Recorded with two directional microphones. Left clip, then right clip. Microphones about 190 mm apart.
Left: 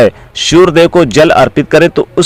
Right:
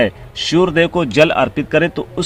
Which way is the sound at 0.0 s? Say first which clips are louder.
Left 9 dB; 40° left (ahead or behind).